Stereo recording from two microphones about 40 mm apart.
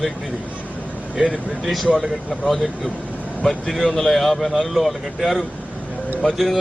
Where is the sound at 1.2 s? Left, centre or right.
Centre.